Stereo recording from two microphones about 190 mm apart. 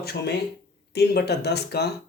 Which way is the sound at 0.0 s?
55° left (ahead or behind).